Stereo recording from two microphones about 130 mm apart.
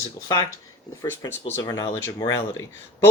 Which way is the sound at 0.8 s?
20° left (ahead or behind).